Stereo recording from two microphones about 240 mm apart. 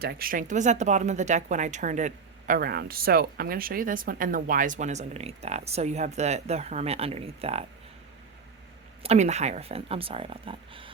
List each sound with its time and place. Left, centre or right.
0.0 s speech: right
9.0 s speech: right